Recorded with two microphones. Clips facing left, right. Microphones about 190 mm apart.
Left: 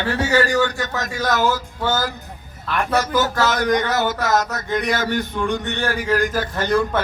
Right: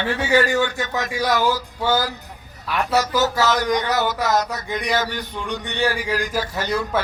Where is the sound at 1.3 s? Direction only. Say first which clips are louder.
Left 1 dB; 50° left (ahead or behind).